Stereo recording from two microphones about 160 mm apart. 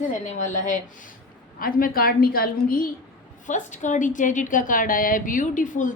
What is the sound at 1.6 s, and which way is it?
A woman's voice, 65° left (ahead or behind).